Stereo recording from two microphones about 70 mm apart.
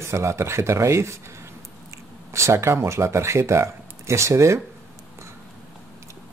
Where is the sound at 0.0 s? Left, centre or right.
Right.